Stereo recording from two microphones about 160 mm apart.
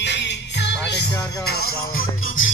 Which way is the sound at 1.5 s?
75° left (ahead or behind).